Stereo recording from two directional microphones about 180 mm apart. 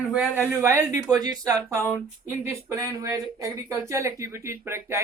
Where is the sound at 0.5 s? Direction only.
15° right (ahead or behind).